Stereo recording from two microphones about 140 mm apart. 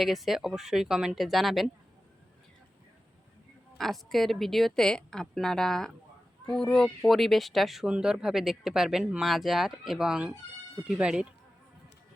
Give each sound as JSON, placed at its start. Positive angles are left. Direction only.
{"t": 0.0, "sound": "speech", "side_deg": 0}
{"t": 3.8, "sound": "speech", "side_deg": 0}